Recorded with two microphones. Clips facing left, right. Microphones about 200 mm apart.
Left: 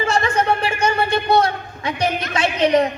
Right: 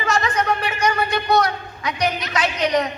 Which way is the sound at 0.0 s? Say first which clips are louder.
Left 2 dB; 30° left (ahead or behind).